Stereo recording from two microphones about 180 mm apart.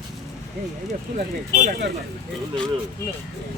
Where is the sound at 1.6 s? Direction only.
55° right (ahead or behind).